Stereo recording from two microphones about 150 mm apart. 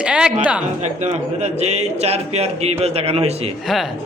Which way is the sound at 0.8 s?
50° right (ahead or behind).